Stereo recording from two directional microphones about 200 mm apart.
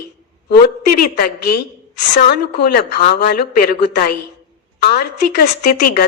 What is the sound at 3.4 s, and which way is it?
A woman's voice, 50° left (ahead or behind).